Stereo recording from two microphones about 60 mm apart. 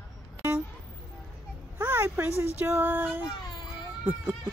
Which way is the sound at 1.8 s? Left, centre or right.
Right.